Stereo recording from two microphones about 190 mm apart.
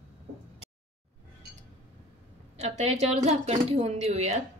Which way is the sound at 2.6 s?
35° right (ahead or behind).